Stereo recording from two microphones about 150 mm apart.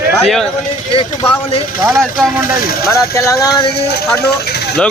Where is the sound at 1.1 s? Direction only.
40° left (ahead or behind).